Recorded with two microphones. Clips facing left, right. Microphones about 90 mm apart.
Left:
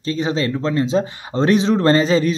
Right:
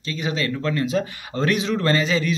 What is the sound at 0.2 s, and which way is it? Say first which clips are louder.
Speech: left 3 dB; 30° left (ahead or behind).